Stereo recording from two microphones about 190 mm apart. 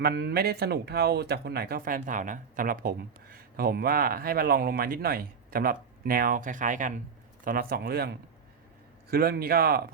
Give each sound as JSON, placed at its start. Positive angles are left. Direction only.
{"t": 0.0, "sound": "speech", "side_deg": -60}